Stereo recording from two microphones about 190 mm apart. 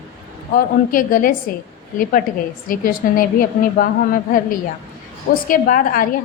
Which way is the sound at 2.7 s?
45° left (ahead or behind).